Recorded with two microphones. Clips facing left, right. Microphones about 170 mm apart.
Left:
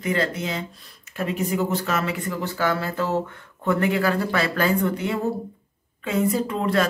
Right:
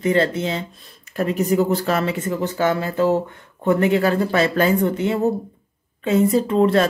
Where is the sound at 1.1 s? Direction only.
40° right (ahead or behind).